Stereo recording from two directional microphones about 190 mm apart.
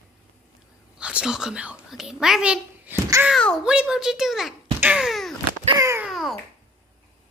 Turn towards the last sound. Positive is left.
turn(degrees=0)  # may be behind; listen again after turning